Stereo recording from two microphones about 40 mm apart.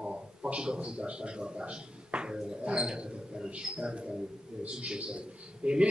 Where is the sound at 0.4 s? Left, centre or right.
Right.